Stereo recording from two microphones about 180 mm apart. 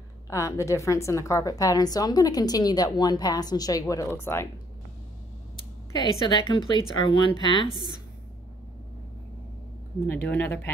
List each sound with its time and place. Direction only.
0.3 s a woman's voice: 15° left (ahead or behind)
5.9 s a woman's voice: 25° left (ahead or behind)
7.7 s a woman's voice: 25° right (ahead or behind)
10.0 s speech: 10° left (ahead or behind)